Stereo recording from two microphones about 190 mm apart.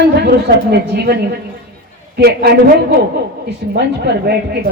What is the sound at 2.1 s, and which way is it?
A woman's voice, 60° right (ahead or behind).